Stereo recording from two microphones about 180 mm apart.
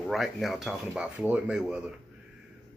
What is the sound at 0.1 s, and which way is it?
Speech, centre (ahead or behind).